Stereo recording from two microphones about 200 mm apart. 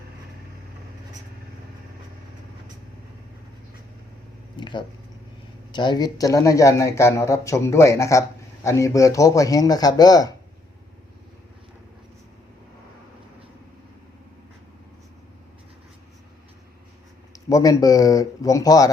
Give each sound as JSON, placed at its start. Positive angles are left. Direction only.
{"t": 4.5, "sound": "speech", "side_deg": 25}
{"t": 17.3, "sound": "speech", "side_deg": 15}